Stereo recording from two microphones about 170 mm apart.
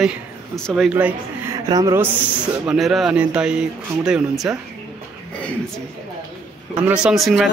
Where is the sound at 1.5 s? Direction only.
20° right (ahead or behind).